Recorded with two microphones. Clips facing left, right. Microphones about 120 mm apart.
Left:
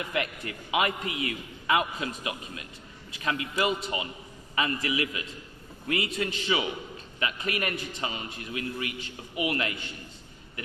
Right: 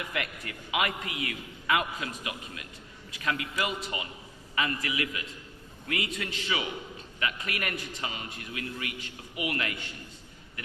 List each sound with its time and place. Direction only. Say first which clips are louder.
0.1 s a man's voice: left 4 dB; 25° left (ahead or behind)